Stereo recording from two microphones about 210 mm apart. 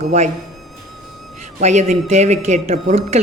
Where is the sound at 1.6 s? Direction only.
35° right (ahead or behind).